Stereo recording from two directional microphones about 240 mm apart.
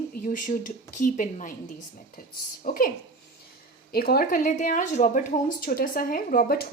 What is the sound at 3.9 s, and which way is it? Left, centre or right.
A woman's voice, left.